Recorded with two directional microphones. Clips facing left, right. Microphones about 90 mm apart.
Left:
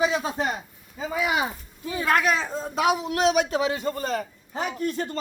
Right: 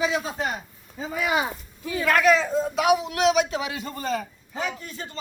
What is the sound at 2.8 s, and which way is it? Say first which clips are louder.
A man's voice: even; 40° left (ahead or behind).